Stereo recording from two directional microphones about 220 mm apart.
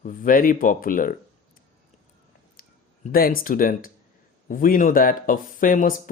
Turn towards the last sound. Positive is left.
turn(degrees=40)  # may be behind; listen again after turning